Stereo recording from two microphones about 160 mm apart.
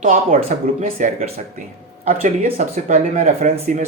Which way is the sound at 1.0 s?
55° right (ahead or behind).